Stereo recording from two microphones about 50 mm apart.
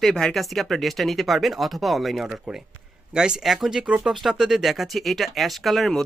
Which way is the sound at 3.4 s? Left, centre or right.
Centre.